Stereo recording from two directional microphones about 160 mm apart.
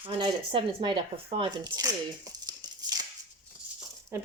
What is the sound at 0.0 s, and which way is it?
A woman's voice, 30° right (ahead or behind).